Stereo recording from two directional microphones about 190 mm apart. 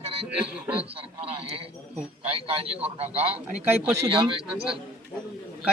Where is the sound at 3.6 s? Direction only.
15° right (ahead or behind).